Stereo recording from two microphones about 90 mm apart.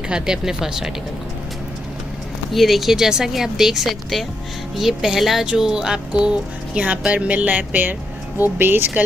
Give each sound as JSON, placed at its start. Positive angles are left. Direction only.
{"t": 0.1, "sound": "speech", "side_deg": -5}
{"t": 2.5, "sound": "speech", "side_deg": 0}